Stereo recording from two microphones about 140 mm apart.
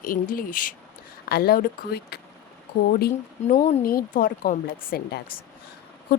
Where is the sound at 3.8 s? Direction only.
90° left.